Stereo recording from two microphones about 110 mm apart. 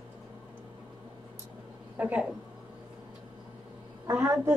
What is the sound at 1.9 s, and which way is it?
Speech, 10° right (ahead or behind).